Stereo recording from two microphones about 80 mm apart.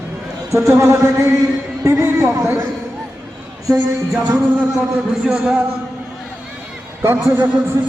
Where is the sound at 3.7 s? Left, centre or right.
Right.